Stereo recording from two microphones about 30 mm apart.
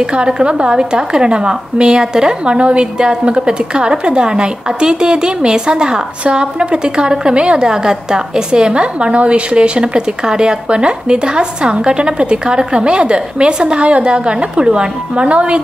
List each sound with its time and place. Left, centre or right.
0.0 s a woman's voice: right